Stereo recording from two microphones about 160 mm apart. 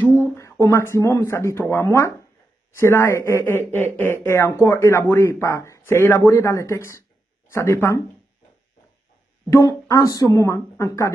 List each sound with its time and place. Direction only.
0.1 s speech: 15° left (ahead or behind)
9.5 s speech: 20° left (ahead or behind)